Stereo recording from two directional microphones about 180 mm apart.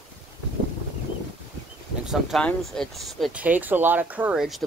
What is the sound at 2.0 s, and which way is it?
Speech, centre (ahead or behind).